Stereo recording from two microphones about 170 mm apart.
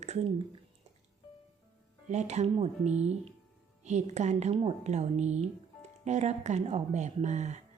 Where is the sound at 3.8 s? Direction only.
45° right (ahead or behind).